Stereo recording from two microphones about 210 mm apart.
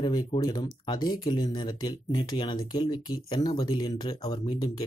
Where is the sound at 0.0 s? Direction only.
20° left (ahead or behind).